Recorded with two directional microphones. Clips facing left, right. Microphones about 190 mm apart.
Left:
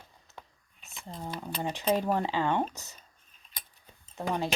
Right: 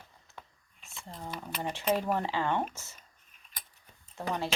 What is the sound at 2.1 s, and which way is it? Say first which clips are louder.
Speech: left 2 dB; 15° left (ahead or behind).